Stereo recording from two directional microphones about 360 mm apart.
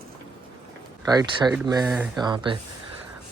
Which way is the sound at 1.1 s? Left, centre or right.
Centre.